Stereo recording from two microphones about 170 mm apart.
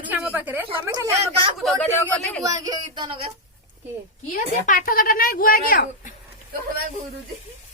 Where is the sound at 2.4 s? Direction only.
20° right (ahead or behind).